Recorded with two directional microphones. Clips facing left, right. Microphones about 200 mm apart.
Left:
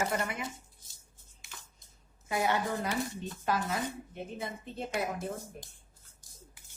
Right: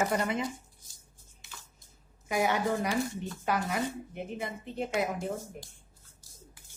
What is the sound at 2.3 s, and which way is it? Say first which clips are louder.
Speech: right 2 dB; 15° right (ahead or behind).